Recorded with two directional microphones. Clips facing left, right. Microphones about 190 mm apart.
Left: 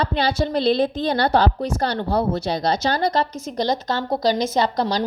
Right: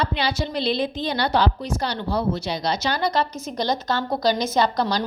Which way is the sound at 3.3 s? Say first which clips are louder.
Left 1 dB; 90° left.